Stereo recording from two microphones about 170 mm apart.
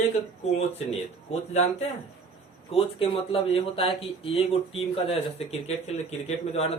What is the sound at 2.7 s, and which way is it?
Speech, 35° left (ahead or behind).